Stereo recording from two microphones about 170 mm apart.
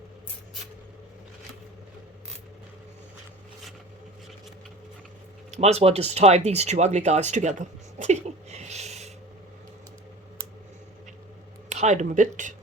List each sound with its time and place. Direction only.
5.5 s speech: 40° right (ahead or behind)
11.7 s speech: 45° right (ahead or behind)